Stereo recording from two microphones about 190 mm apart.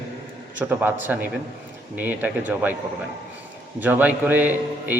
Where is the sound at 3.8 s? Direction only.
10° right (ahead or behind).